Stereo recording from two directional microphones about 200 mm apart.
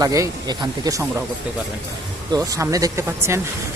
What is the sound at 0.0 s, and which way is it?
Speech, 15° right (ahead or behind).